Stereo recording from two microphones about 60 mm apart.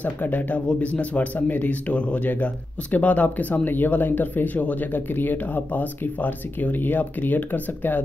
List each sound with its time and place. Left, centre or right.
0.0 s speech: left